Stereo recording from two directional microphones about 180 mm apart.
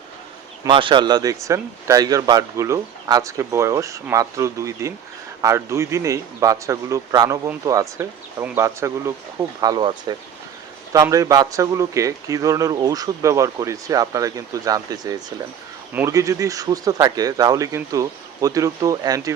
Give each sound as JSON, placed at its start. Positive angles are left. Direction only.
{"t": 0.6, "sound": "a man's voice", "side_deg": -25}